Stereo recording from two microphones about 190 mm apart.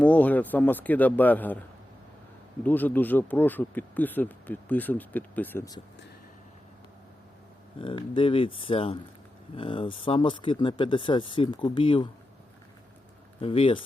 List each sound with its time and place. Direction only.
0.0 s speech: 10° left (ahead or behind)
2.6 s speech: 10° left (ahead or behind)
7.8 s speech: 25° left (ahead or behind)
13.4 s speech: 30° left (ahead or behind)